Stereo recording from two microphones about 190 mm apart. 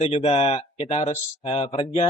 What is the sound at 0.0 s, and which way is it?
Speech, 30° left (ahead or behind).